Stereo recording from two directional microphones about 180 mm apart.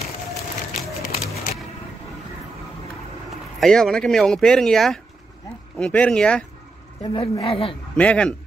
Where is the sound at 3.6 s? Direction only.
5° left (ahead or behind).